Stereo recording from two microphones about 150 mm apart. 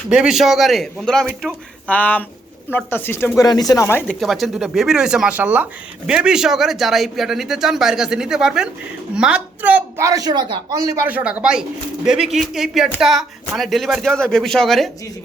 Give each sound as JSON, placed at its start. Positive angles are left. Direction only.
{"t": 0.1, "sound": "speech", "side_deg": -5}
{"t": 4.2, "sound": "a man's voice", "side_deg": 0}
{"t": 11.0, "sound": "speech", "side_deg": -10}